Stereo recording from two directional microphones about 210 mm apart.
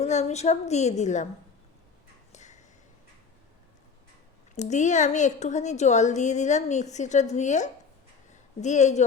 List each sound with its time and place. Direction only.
0.0 s a woman's voice: 30° left (ahead or behind)
2.3 s a sound: 35° left (ahead or behind)
4.5 s a woman's voice: 35° left (ahead or behind)